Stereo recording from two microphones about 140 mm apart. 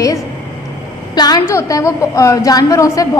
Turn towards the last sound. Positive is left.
turn(degrees=25)  # may be behind; listen again after turning